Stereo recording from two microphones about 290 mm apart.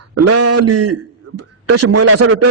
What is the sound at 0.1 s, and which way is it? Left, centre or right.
A man's voice, right.